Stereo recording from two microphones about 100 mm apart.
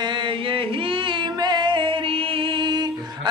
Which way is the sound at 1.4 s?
50° right (ahead or behind).